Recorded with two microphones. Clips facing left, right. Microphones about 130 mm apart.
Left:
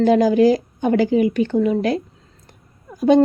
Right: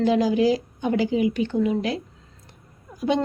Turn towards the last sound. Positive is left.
turn(degrees=45)  # may be behind; listen again after turning